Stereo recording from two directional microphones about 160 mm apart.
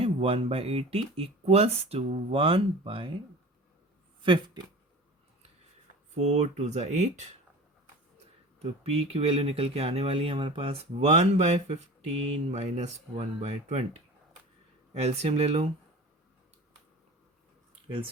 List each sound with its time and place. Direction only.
0.0 s speech: 40° right (ahead or behind)
4.2 s speech: 30° right (ahead or behind)
6.1 s speech: 45° right (ahead or behind)
8.5 s speech: 40° right (ahead or behind)
14.9 s speech: 40° right (ahead or behind)